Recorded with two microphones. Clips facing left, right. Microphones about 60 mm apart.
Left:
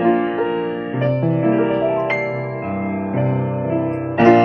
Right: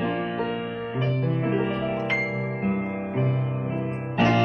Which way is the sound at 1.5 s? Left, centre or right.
Left.